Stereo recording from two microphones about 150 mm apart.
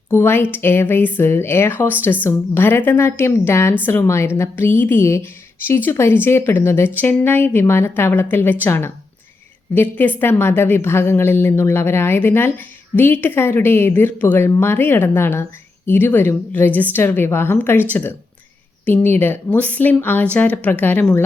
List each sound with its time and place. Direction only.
0.1 s a woman's voice: 15° left (ahead or behind)
18.9 s a woman's voice: 10° left (ahead or behind)